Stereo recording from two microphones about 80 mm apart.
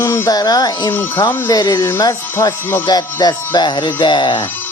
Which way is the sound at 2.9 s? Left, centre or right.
Left.